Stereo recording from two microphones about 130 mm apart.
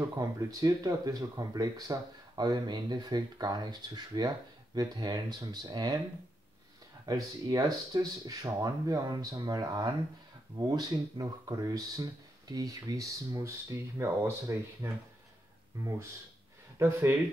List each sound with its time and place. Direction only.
0.2 s speech: 25° right (ahead or behind)
7.1 s speech: 30° right (ahead or behind)
16.7 s speech: 20° right (ahead or behind)